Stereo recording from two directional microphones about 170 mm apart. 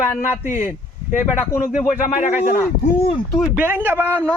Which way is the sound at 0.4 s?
15° right (ahead or behind).